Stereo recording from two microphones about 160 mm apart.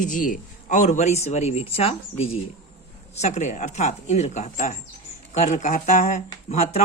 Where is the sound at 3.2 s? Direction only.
50° left (ahead or behind).